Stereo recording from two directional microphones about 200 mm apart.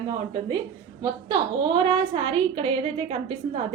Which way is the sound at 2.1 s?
25° right (ahead or behind).